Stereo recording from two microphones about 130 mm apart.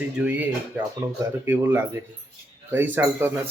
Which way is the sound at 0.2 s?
10° right (ahead or behind).